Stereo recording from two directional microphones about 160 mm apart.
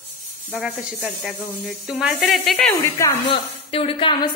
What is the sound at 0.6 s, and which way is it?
Speech, centre (ahead or behind).